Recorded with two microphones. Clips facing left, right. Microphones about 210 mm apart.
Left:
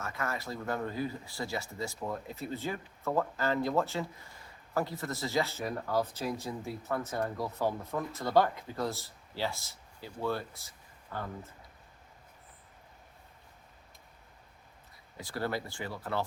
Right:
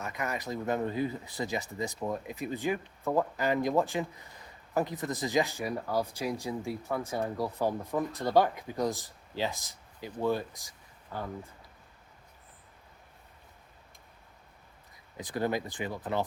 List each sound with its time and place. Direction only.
0.0 s speech: 15° right (ahead or behind)
15.2 s speech: 20° right (ahead or behind)